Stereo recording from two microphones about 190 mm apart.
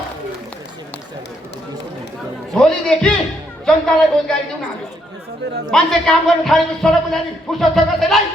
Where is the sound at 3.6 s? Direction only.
5° left (ahead or behind).